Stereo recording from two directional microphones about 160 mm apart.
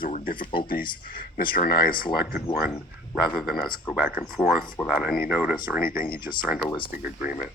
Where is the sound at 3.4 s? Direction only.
Centre (ahead or behind).